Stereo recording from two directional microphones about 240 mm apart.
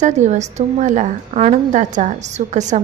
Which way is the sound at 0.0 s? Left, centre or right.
Right.